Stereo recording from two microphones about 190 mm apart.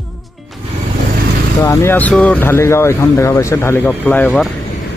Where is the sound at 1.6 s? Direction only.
15° left (ahead or behind).